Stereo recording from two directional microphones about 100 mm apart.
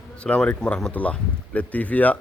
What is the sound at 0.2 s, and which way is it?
Speech, 10° left (ahead or behind).